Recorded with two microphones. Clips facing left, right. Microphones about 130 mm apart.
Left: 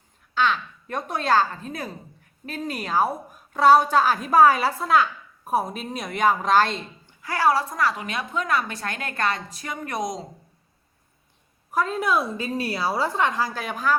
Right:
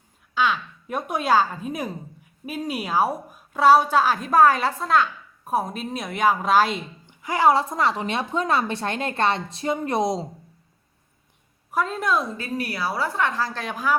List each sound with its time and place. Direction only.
0.3 s a woman's voice: 5° right (ahead or behind)
7.0 s a woman's voice: 20° right (ahead or behind)
11.7 s a woman's voice: centre (ahead or behind)
12.4 s a woman's voice: 25° left (ahead or behind); by 13.8 s 5° left (ahead or behind)